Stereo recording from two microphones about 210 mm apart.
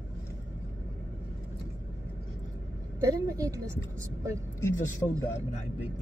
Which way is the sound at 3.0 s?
15° right (ahead or behind).